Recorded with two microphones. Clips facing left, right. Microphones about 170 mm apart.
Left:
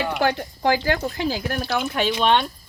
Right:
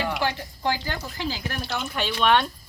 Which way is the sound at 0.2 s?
60° left (ahead or behind).